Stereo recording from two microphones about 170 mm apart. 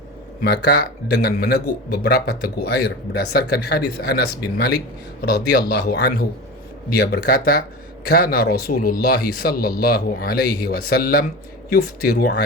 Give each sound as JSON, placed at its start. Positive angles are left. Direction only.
{"t": 0.4, "sound": "speech", "side_deg": 70}